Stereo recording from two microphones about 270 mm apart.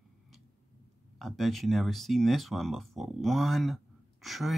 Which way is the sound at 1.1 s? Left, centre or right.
Centre.